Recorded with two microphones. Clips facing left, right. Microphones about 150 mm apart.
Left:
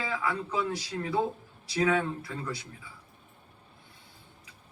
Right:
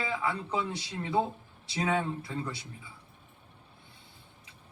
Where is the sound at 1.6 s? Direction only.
25° right (ahead or behind).